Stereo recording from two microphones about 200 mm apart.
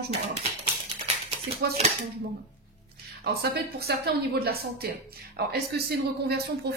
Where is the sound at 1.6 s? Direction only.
50° right (ahead or behind).